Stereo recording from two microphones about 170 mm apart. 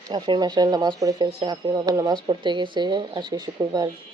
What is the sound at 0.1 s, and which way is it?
Speech, 25° right (ahead or behind).